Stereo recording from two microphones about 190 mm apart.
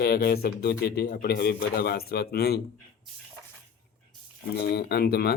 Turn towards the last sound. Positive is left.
turn(degrees=55)  # may be behind; listen again after turning